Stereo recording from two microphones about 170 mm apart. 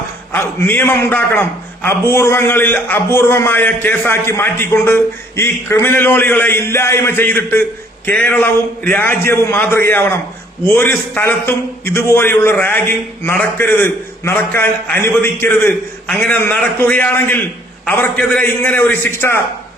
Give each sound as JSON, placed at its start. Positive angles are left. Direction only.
{"t": 0.3, "sound": "a man's voice", "side_deg": 15}